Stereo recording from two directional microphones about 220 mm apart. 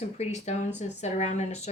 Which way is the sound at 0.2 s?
30° left (ahead or behind).